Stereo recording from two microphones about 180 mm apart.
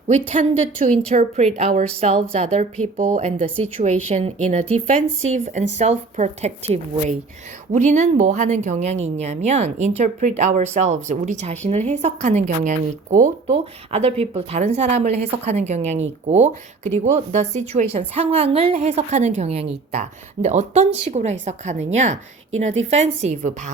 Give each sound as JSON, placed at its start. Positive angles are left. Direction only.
{"t": 0.1, "sound": "a woman's voice", "side_deg": -35}